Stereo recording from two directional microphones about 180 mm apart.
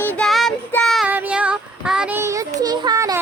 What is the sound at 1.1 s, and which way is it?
Speech, 10° right (ahead or behind).